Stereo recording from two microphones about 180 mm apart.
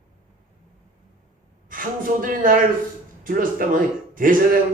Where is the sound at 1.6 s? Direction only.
50° right (ahead or behind).